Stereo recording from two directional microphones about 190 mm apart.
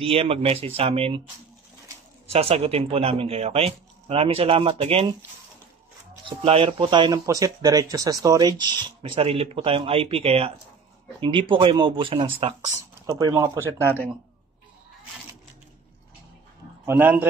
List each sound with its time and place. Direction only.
0.0 s speech: 30° right (ahead or behind)
2.3 s speech: 30° right (ahead or behind)
6.2 s speech: 30° right (ahead or behind)
16.8 s speech: 10° right (ahead or behind)